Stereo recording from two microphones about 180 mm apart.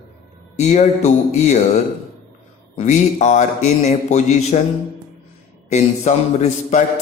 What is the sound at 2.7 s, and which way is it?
A man's voice, 40° left (ahead or behind).